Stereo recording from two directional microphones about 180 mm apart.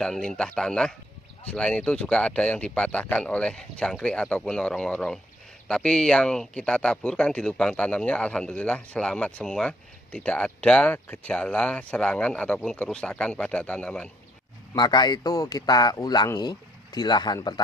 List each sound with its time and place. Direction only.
0.0 s speech: 5° left (ahead or behind)
14.7 s a man's voice: 25° left (ahead or behind)